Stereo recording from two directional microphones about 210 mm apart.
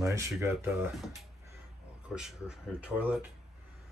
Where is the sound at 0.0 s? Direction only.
15° right (ahead or behind).